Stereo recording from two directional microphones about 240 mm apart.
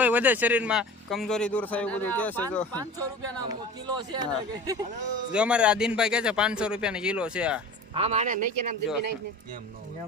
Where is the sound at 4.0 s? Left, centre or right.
Centre.